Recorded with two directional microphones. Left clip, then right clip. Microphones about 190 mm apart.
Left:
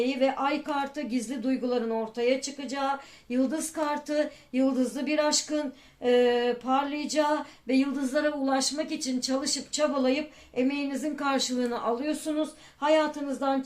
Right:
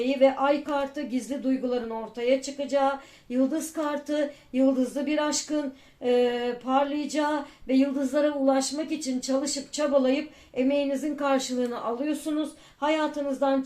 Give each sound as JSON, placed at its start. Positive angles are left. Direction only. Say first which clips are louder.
{"t": 0.0, "sound": "female singing", "louder": "right 4 dB", "side_deg": 35}